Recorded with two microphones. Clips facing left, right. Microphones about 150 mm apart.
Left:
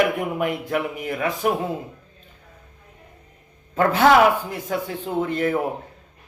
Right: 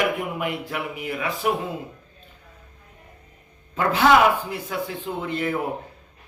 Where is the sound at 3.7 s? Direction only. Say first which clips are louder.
Left 2 dB; 45° left (ahead or behind).